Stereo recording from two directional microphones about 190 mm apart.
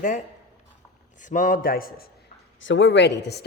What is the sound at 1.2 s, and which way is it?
Speech, 45° left (ahead or behind).